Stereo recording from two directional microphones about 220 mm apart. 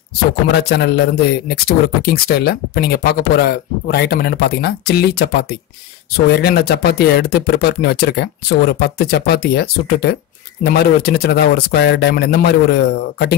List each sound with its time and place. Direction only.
0.5 s speech: 45° left (ahead or behind)